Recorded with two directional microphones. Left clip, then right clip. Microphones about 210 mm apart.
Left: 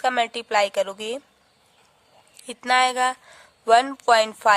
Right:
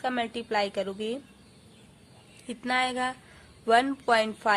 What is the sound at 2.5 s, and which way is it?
A woman's voice, 45° left (ahead or behind).